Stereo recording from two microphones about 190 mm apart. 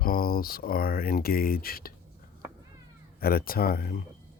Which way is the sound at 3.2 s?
50° left (ahead or behind).